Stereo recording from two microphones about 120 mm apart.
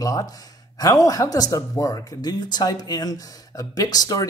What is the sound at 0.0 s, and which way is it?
Speech, 30° left (ahead or behind).